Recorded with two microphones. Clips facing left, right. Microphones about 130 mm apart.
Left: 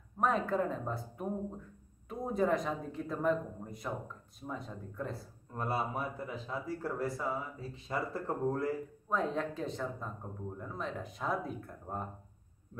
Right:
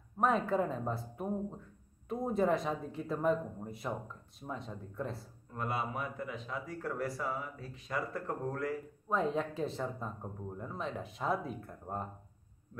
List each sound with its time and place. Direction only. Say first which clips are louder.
0.2 s speech: right 1 dB; centre (ahead or behind)
5.6 s speech: left 2 dB; 35° left (ahead or behind)
9.1 s speech: right 1 dB; centre (ahead or behind)